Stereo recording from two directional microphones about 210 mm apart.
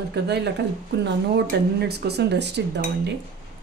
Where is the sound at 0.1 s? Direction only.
55° right (ahead or behind).